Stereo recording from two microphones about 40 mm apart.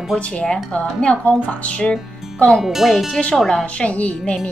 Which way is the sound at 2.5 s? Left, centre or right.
Centre.